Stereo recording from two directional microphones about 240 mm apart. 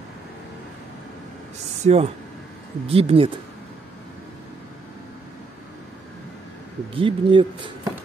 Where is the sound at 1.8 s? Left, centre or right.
Right.